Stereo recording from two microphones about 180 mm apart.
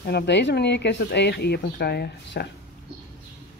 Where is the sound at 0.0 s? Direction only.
70° left (ahead or behind).